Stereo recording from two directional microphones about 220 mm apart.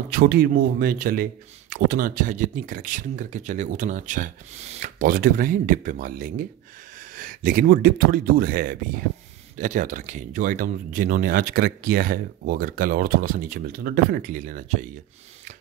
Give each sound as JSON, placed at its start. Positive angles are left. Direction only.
{"t": 0.1, "sound": "speech", "side_deg": -45}